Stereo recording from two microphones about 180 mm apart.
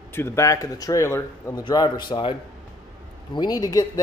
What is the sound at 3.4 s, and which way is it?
Speech, 20° left (ahead or behind).